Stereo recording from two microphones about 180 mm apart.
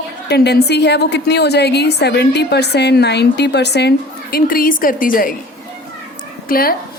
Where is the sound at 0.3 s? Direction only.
65° left (ahead or behind).